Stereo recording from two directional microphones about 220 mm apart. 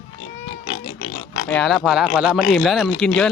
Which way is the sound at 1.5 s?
Centre (ahead or behind).